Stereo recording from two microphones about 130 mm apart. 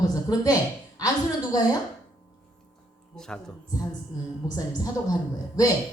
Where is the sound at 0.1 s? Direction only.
30° left (ahead or behind).